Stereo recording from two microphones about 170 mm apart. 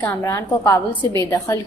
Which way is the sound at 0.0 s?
10° left (ahead or behind).